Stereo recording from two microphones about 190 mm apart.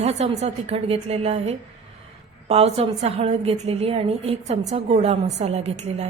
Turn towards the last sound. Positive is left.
turn(degrees=-35)  # may be behind; listen again after turning